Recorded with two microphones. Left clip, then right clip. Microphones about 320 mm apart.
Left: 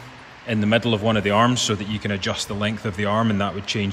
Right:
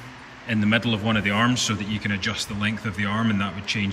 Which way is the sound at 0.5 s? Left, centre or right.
Centre.